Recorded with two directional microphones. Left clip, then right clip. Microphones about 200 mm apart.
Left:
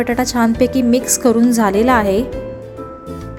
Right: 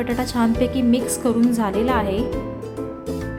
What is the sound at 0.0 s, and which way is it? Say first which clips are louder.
A woman's voice: left 6 dB; 20° left (ahead or behind).